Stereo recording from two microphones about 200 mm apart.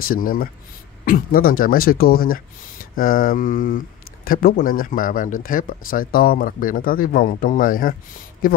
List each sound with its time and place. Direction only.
0.0 s speech: 45° left (ahead or behind)